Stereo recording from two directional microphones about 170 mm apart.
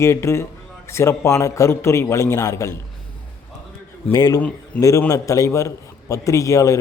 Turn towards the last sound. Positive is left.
turn(degrees=20)  # may be behind; listen again after turning